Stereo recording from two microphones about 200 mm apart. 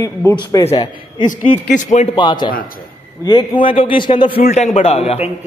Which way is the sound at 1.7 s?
35° left (ahead or behind).